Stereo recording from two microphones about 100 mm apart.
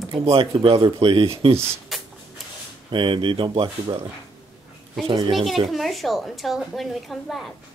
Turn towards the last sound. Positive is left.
turn(degrees=0)  # may be behind; listen again after turning